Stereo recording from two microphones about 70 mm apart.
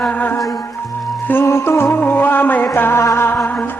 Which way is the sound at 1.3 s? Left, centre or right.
Left.